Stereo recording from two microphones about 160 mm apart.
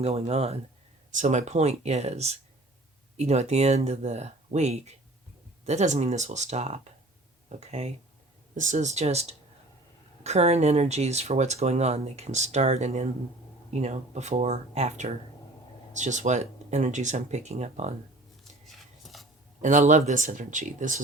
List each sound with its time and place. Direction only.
0.0 s speech: 40° right (ahead or behind)
18.6 s a sound: centre (ahead or behind)
19.6 s speech: 50° right (ahead or behind)